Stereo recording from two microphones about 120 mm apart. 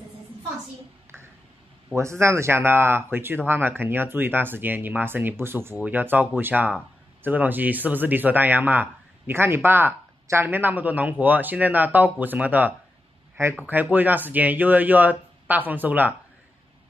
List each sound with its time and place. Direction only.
2.0 s speech: 25° right (ahead or behind)